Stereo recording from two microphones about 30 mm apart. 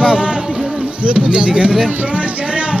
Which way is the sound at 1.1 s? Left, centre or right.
Right.